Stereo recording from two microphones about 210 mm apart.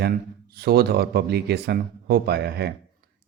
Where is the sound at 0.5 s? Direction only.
50° right (ahead or behind).